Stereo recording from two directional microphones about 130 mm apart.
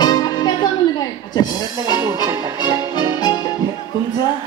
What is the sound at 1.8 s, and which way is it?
Music, 25° right (ahead or behind).